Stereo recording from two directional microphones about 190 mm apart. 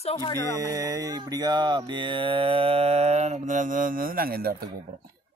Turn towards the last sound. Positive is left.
turn(degrees=-55)  # may be behind; listen again after turning